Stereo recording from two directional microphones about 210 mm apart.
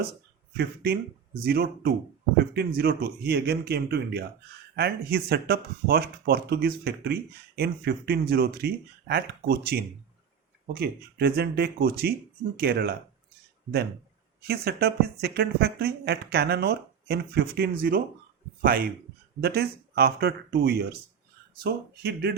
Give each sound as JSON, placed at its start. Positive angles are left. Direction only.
{"t": 0.5, "sound": "speech", "side_deg": -50}
{"t": 14.4, "sound": "speech", "side_deg": -45}
{"t": 19.4, "sound": "speech", "side_deg": -50}